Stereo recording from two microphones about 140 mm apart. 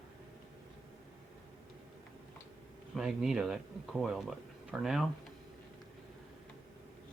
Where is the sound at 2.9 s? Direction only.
5° right (ahead or behind).